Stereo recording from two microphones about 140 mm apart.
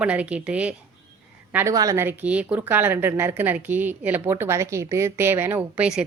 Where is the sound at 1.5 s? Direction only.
25° right (ahead or behind).